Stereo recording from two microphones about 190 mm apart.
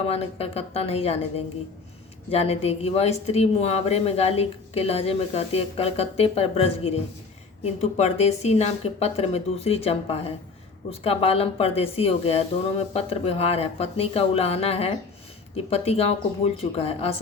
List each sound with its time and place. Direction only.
0.1 s speech: 30° left (ahead or behind)